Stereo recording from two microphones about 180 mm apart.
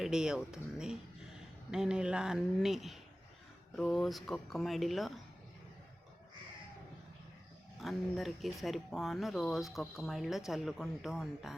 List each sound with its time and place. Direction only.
0.0 s speech: 5° right (ahead or behind)
7.8 s speech: centre (ahead or behind)